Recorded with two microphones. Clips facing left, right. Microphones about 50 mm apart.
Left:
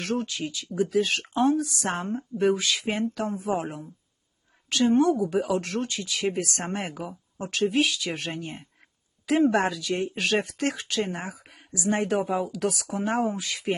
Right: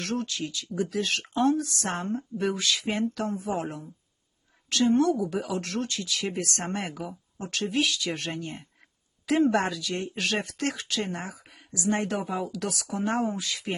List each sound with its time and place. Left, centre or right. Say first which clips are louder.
0.0 s speech: left 2 dB; centre
11.3 s a sound: left 3 dB; centre
11.8 s speech: left 1 dB; centre
12.1 s speech: left 5 dB; left
12.4 s speech: left 4 dB; centre